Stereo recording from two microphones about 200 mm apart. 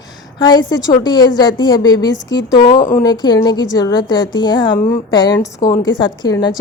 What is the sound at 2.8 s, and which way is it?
Speech, 40° left (ahead or behind).